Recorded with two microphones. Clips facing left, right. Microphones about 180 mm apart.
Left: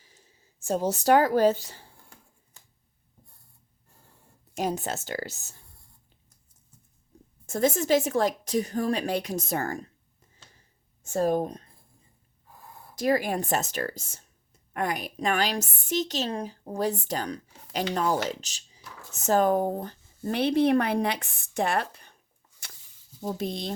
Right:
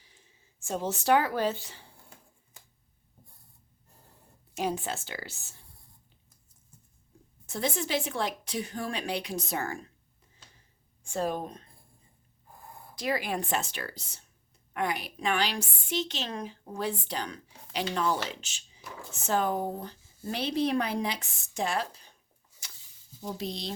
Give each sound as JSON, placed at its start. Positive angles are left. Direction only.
{"t": 0.6, "sound": "a woman's voice", "side_deg": 40}
{"t": 4.5, "sound": "a woman's voice", "side_deg": 40}
{"t": 7.4, "sound": "a woman's voice", "side_deg": 45}
{"t": 11.0, "sound": "a woman's voice", "side_deg": 40}
{"t": 13.0, "sound": "a woman's voice", "side_deg": 45}
{"t": 22.6, "sound": "a sound", "side_deg": 60}
{"t": 23.2, "sound": "a woman's voice", "side_deg": 50}